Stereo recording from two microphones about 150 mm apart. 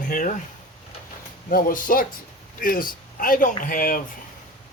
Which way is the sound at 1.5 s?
70° left (ahead or behind).